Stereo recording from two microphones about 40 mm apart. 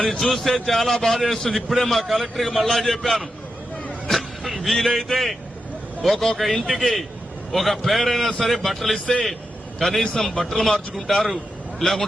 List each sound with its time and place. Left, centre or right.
0.0 s a man's voice: centre
4.0 s vehicle: centre
6.0 s a man's voice: centre
10.0 s a man's voice: centre